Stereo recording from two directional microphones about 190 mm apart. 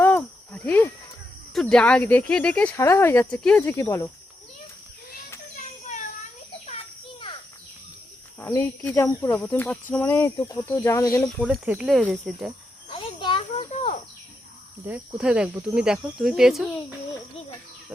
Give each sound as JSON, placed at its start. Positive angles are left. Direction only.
{"t": 0.0, "sound": "cricket", "side_deg": 10}
{"t": 1.5, "sound": "speech", "side_deg": 5}
{"t": 8.4, "sound": "speech", "side_deg": 10}
{"t": 11.2, "sound": "speech", "side_deg": 0}
{"t": 12.9, "sound": "a sound", "side_deg": 25}
{"t": 14.8, "sound": "speech", "side_deg": -5}